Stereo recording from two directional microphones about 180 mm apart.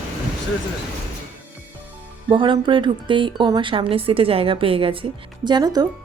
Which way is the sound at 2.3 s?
25° right (ahead or behind).